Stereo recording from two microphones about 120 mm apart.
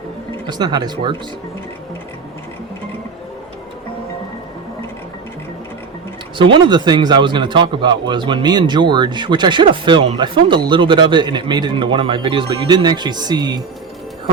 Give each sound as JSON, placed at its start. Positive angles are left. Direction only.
{"t": 0.4, "sound": "a man's voice", "side_deg": -35}
{"t": 6.3, "sound": "a man's voice", "side_deg": -45}